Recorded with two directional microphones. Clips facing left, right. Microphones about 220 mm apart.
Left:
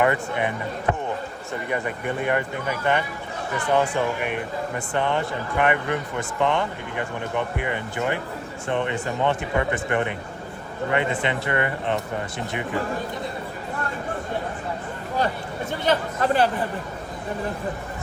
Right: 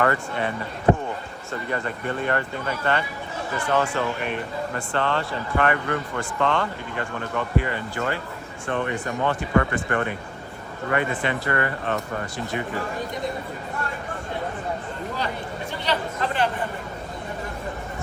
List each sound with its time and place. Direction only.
0.0 s speech: 15° left (ahead or behind)
1.7 s speech: 15° left (ahead or behind)
15.8 s chatter: 45° left (ahead or behind)